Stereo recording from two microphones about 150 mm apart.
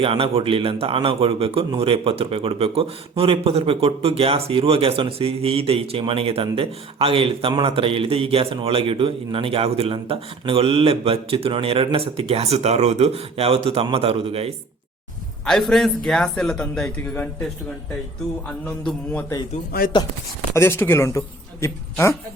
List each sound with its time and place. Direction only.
0.0 s a man's voice: 40° right (ahead or behind)
15.4 s a man's voice: centre (ahead or behind)
18.4 s speech: 10° left (ahead or behind)
20.5 s speech: 15° left (ahead or behind)